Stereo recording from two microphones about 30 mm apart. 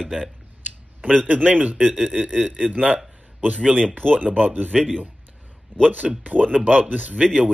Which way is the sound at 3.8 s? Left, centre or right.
Left.